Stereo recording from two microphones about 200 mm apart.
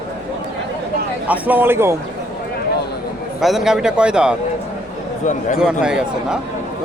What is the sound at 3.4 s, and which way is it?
Speech, centre (ahead or behind).